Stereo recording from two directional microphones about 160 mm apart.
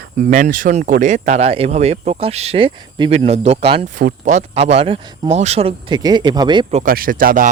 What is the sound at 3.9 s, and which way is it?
Speech, 50° right (ahead or behind).